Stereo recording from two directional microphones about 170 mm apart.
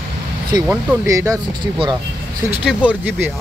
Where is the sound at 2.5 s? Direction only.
5° right (ahead or behind).